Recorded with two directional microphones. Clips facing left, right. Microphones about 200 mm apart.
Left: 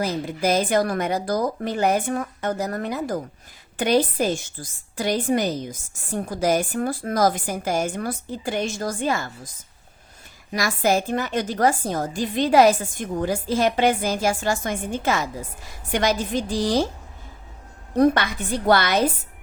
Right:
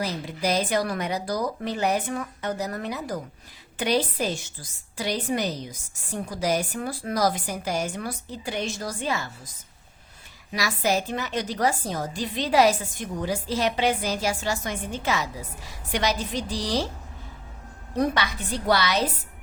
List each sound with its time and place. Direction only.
0.0 s a woman's voice: 50° left (ahead or behind)
10.5 s a woman's voice: 50° left (ahead or behind)
17.9 s a woman's voice: 50° left (ahead or behind)